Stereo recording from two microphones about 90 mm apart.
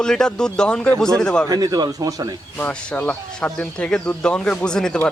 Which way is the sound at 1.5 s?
45° right (ahead or behind).